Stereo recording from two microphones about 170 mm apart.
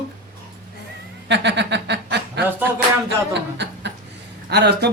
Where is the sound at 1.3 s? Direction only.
90° right.